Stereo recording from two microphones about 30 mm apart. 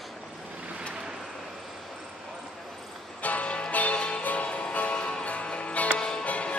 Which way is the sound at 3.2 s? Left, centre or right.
Left.